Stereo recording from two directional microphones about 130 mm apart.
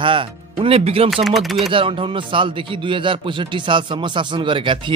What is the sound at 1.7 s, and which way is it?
Speech, 40° right (ahead or behind).